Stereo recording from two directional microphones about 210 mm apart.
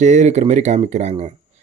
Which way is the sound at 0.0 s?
35° right (ahead or behind).